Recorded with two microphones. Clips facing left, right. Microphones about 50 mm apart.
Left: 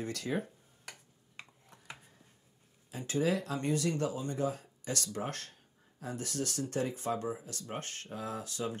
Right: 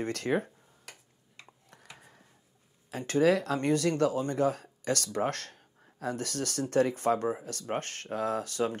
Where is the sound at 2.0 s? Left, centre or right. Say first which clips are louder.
Right 5 dB; right.